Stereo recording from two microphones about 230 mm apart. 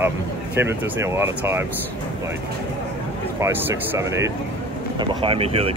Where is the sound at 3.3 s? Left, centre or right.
Centre.